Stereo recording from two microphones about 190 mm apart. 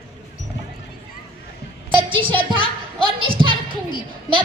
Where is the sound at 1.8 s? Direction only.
25° right (ahead or behind).